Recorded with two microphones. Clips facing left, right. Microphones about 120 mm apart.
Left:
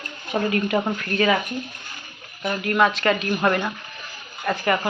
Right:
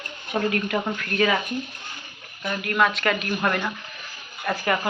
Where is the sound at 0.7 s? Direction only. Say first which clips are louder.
Left 3 dB; 35° left (ahead or behind).